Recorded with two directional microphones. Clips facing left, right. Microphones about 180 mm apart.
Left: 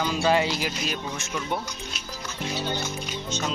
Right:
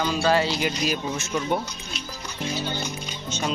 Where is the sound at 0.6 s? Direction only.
5° right (ahead or behind).